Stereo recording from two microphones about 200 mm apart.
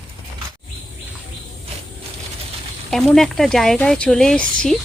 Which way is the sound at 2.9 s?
Centre (ahead or behind).